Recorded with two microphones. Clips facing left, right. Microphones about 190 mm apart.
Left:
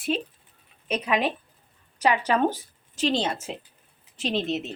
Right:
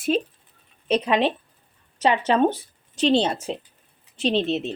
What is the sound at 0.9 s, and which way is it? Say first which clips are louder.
Speech: right 5 dB; 30° right (ahead or behind).